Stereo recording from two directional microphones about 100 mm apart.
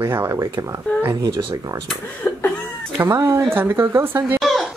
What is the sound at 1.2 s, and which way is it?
Speech, 40° right (ahead or behind).